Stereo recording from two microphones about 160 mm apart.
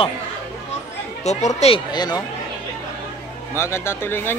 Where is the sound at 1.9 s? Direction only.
25° left (ahead or behind).